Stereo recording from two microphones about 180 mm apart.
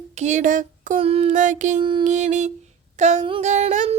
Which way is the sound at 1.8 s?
25° right (ahead or behind).